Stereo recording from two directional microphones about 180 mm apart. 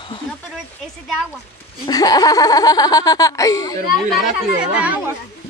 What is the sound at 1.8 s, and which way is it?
Speech, 20° left (ahead or behind).